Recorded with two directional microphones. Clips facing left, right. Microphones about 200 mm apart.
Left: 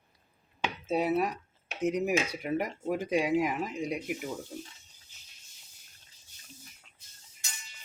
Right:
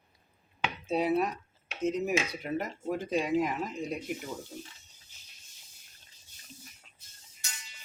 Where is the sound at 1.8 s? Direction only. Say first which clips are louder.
Left 1 dB; 15° left (ahead or behind).